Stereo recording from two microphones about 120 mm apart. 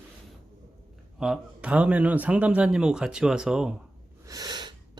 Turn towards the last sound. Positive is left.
turn(degrees=-35)  # may be behind; listen again after turning